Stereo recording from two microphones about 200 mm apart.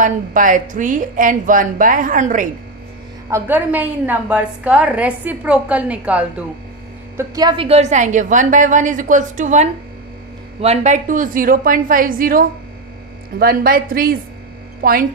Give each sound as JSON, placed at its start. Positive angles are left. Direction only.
{"t": 0.0, "sound": "a woman's voice", "side_deg": -40}
{"t": 3.3, "sound": "a woman's voice", "side_deg": -10}
{"t": 7.2, "sound": "a woman's voice", "side_deg": -20}